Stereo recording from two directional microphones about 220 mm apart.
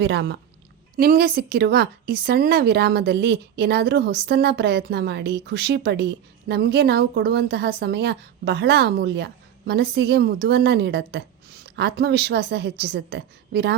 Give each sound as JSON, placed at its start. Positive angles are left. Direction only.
{"t": 0.0, "sound": "speech", "side_deg": -55}
{"t": 0.9, "sound": "speech", "side_deg": -40}